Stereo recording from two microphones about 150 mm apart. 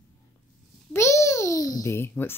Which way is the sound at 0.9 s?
20° left (ahead or behind).